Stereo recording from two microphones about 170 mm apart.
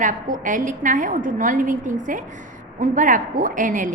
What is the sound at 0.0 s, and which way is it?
A woman's voice, 50° right (ahead or behind).